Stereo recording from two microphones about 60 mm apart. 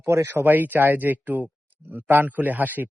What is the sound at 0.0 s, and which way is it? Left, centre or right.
Speech, right.